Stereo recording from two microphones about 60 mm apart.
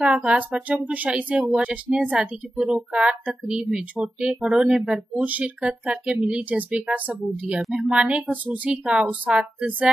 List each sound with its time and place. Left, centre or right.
0.0 s speech: centre
5.2 s speech: right